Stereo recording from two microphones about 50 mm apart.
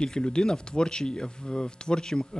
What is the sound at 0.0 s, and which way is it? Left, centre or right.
Speech, centre.